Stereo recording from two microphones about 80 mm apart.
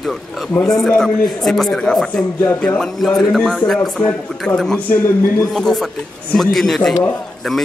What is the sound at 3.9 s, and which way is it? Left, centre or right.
Speech, centre.